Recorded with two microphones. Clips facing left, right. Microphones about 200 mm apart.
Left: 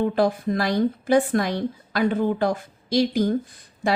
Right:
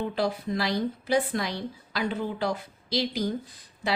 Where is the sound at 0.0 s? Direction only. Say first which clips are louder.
Left 7 dB; 50° left (ahead or behind).